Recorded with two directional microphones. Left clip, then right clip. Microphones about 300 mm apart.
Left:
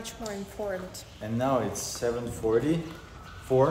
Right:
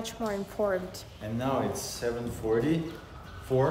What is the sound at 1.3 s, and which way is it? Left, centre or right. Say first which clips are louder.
Speech: left 3 dB; centre.